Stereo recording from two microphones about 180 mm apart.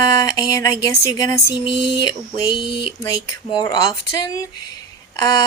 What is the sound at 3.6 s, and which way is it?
Speech, 20° left (ahead or behind).